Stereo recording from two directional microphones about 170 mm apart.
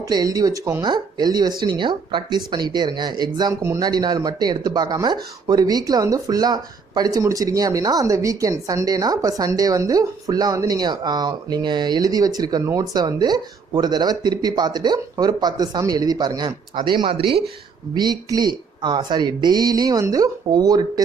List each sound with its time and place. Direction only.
0.1 s speech: 20° right (ahead or behind)